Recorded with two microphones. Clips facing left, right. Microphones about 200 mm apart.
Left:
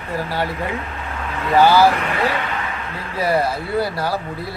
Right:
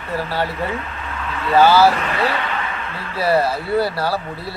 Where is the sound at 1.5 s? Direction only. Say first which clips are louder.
Even; 15° left (ahead or behind).